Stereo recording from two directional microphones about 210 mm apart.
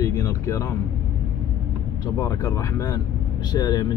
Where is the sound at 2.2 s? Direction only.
15° left (ahead or behind).